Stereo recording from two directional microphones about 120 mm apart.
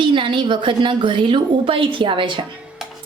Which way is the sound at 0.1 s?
45° right (ahead or behind).